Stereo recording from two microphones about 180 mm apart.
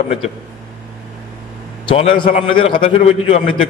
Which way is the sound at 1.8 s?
30° left (ahead or behind).